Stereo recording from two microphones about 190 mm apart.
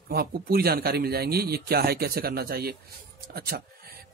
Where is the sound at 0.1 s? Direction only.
55° right (ahead or behind).